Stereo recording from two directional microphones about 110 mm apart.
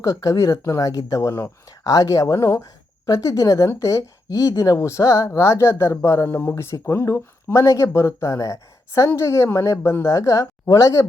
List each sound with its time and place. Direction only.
0.0 s a woman's voice: 30° left (ahead or behind)